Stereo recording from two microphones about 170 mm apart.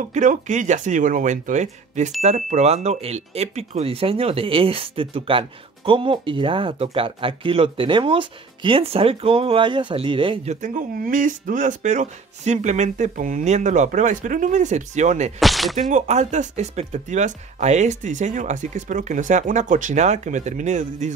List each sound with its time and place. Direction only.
0.1 s speech: 45° right (ahead or behind)
15.3 s speech: centre (ahead or behind)
15.9 s speech: 45° right (ahead or behind)